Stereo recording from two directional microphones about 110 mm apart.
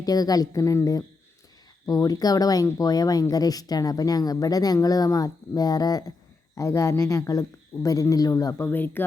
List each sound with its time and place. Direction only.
0.0 s speech: 35° left (ahead or behind)
8.6 s speech: 20° left (ahead or behind)